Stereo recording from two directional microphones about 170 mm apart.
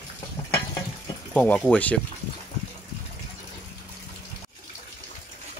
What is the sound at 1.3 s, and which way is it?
Speech, 5° left (ahead or behind).